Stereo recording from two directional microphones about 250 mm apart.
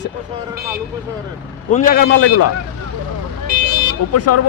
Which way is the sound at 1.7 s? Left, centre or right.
Left.